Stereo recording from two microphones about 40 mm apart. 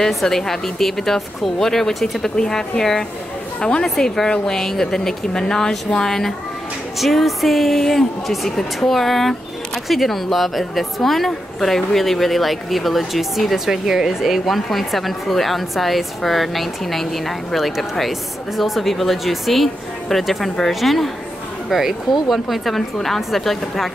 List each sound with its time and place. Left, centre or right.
0.1 s a woman's voice: centre
14.4 s a woman's voice: centre